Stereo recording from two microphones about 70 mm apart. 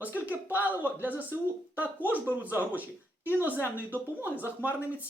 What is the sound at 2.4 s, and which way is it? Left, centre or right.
Speech, right.